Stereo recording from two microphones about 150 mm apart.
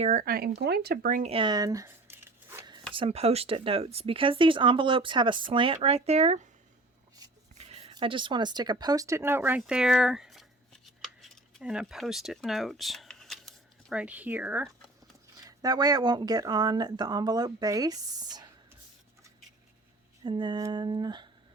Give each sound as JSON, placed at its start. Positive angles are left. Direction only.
{"t": 0.0, "sound": "speech", "side_deg": -60}
{"t": 1.2, "sound": "a sound", "side_deg": -35}
{"t": 2.9, "sound": "speech", "side_deg": -40}
{"t": 7.2, "sound": "rub", "side_deg": -25}
{"t": 7.6, "sound": "speech", "side_deg": -45}
{"t": 9.6, "sound": "a sound", "side_deg": -5}
{"t": 13.9, "sound": "speech", "side_deg": -10}
{"t": 15.4, "sound": "speech", "side_deg": -25}
{"t": 20.2, "sound": "speech", "side_deg": -30}